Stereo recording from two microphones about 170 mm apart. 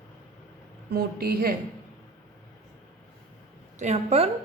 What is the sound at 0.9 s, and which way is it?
Speech, 65° right (ahead or behind).